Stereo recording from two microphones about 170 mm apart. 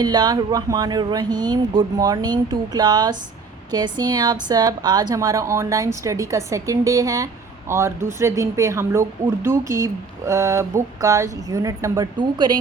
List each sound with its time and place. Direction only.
0.0 s a woman's voice: 25° right (ahead or behind)